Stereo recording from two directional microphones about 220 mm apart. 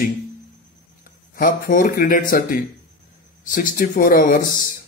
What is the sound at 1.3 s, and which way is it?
Speech, 40° left (ahead or behind).